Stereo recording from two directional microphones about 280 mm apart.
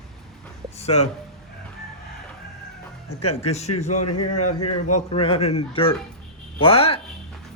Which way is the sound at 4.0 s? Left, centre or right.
Left.